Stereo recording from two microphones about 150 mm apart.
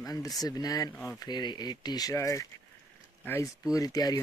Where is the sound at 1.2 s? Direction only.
30° left (ahead or behind).